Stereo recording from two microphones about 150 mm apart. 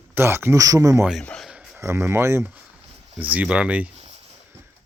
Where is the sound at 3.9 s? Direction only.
45° right (ahead or behind).